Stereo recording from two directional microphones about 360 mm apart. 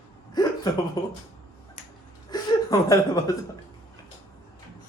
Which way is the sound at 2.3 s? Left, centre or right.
Centre.